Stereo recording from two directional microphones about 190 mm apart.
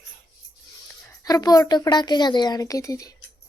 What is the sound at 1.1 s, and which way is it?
A woman's voice, 20° left (ahead or behind).